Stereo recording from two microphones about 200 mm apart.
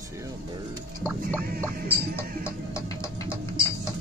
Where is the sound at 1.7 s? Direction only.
50° right (ahead or behind).